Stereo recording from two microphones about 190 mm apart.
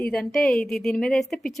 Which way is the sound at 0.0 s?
5° left (ahead or behind).